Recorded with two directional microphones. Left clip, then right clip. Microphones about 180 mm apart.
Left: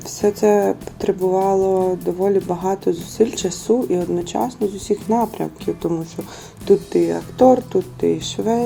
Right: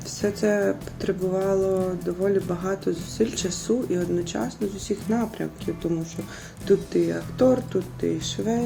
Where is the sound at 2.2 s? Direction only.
20° left (ahead or behind).